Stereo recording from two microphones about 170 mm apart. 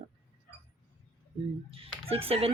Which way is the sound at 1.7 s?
35° right (ahead or behind).